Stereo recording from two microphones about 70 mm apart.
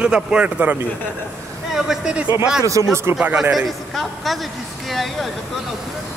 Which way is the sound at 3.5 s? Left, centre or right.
Centre.